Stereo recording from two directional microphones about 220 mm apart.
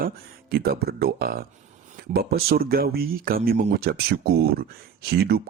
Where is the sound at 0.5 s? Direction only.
45° right (ahead or behind).